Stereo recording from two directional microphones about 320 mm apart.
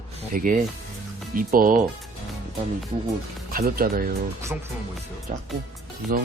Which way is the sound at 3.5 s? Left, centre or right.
Right.